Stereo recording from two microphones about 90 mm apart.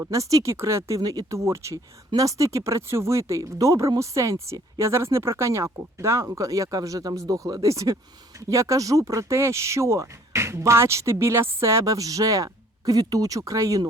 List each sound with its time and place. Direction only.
0.0 s speech: 35° right (ahead or behind)